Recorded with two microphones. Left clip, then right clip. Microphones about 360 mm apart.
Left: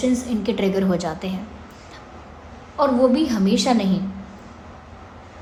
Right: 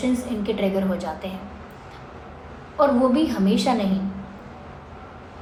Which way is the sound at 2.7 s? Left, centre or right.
Left.